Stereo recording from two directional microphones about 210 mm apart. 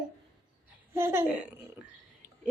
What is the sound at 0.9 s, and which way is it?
Speech, 10° right (ahead or behind).